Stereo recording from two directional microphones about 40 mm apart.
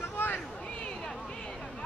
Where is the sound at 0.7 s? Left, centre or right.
Left.